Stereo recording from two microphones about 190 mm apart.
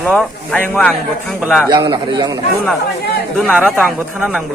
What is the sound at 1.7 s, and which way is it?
Speech, 25° right (ahead or behind).